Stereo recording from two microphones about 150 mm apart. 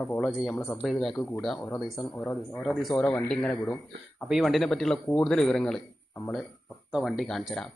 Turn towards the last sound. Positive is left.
turn(degrees=0)  # may be behind; listen again after turning